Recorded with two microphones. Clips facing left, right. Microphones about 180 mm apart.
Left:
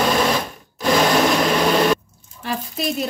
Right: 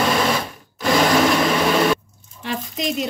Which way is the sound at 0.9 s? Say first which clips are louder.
Even; centre (ahead or behind).